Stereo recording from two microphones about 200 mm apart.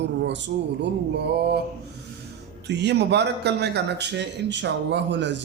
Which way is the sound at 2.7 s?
55° right (ahead or behind).